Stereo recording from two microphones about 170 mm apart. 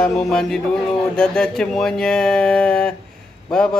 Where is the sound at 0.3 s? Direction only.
5° left (ahead or behind).